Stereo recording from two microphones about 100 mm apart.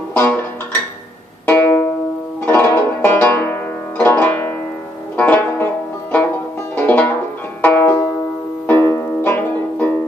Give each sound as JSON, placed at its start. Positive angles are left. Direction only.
{"t": 0.1, "sound": "music", "side_deg": 15}
{"t": 5.1, "sound": "banjo", "side_deg": 15}
{"t": 6.7, "sound": "banjo", "side_deg": 15}
{"t": 8.6, "sound": "music", "side_deg": 20}